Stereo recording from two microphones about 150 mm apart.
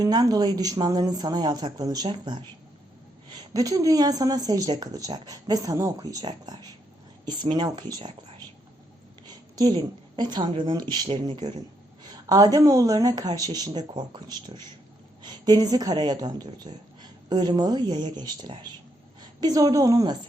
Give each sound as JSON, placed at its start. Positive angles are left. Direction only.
{"t": 0.0, "sound": "speech", "side_deg": -25}
{"t": 9.2, "sound": "a woman's voice", "side_deg": -25}